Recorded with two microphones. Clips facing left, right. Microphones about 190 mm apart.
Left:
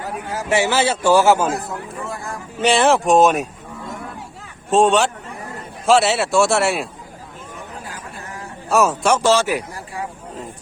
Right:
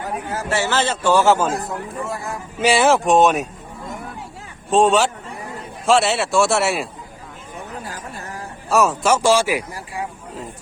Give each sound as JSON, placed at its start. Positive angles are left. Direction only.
{"t": 0.3, "sound": "a man's voice", "side_deg": 15}
{"t": 2.0, "sound": "a man's voice", "side_deg": -5}
{"t": 8.7, "sound": "a man's voice", "side_deg": 0}
{"t": 9.2, "sound": "speech", "side_deg": -10}